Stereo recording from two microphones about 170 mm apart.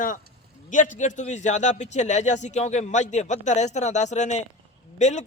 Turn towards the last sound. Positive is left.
turn(degrees=45)  # may be behind; listen again after turning